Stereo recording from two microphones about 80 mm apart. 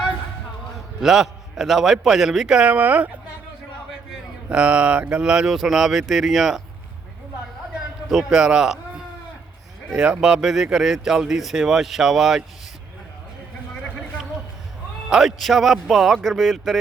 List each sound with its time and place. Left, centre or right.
1.0 s speech: centre
2.6 s speech: centre
4.4 s speech: centre
8.1 s speech: centre
10.0 s speech: centre
15.1 s speech: centre